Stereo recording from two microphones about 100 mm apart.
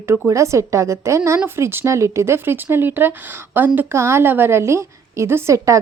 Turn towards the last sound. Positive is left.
turn(degrees=-30)  # may be behind; listen again after turning